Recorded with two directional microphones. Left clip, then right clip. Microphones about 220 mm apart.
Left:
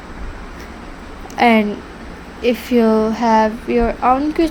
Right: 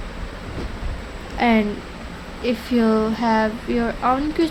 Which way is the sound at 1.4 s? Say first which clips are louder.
Left 6 dB; 25° left (ahead or behind).